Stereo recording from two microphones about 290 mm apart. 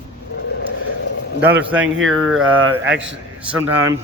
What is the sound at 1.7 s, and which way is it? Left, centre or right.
Speech, centre.